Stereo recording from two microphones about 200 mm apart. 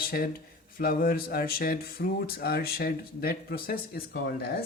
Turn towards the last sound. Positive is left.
turn(degrees=50)  # may be behind; listen again after turning